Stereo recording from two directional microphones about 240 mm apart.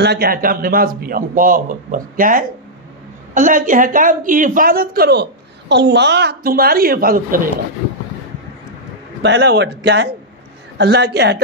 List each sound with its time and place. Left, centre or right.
0.0 s a woman's voice: right
9.2 s a man's voice: right